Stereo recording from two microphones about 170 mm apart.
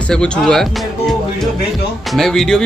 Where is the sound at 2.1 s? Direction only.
Centre (ahead or behind).